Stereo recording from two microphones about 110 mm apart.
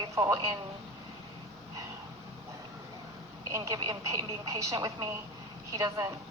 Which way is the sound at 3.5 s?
35° right (ahead or behind).